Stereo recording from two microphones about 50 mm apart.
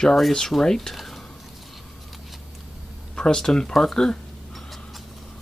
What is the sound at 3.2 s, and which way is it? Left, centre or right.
Speech, centre.